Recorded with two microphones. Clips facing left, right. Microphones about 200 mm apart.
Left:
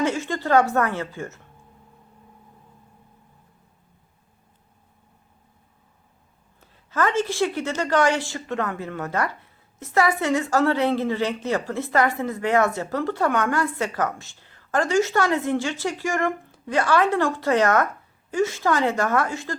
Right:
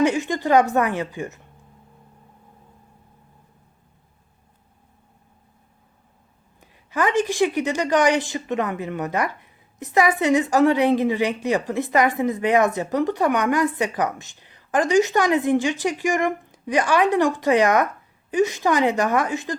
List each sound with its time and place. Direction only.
0.0 s a woman's voice: 15° right (ahead or behind)
6.6 s a woman's voice: 15° right (ahead or behind)